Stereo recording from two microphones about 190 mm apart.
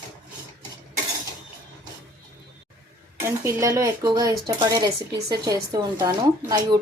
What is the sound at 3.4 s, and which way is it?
Speech, 15° right (ahead or behind).